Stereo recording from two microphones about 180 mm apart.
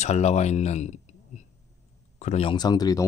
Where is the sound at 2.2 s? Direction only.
35° left (ahead or behind).